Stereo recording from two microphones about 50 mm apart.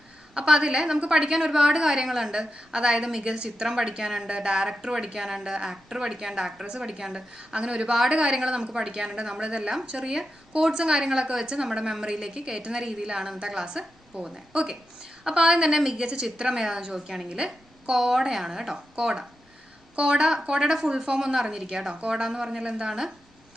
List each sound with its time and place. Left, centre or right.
0.3 s a woman's voice: centre
7.9 s a woman's voice: centre